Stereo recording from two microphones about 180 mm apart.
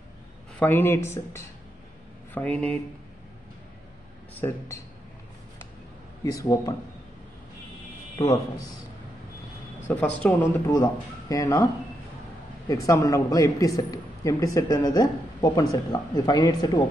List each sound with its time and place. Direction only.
0.6 s speech: 10° left (ahead or behind)
4.4 s speech: 15° left (ahead or behind)
6.3 s speech: 20° left (ahead or behind)
8.2 s a man's voice: 20° left (ahead or behind)
9.8 s speech: 10° left (ahead or behind)
10.7 s a man's voice: 20° left (ahead or behind)
12.6 s a man's voice: 20° left (ahead or behind)